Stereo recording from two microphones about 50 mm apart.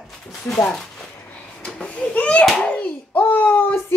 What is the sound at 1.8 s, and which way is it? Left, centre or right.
Speech, left.